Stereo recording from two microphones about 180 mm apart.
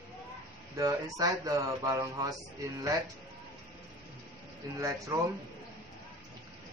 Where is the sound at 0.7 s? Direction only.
20° right (ahead or behind).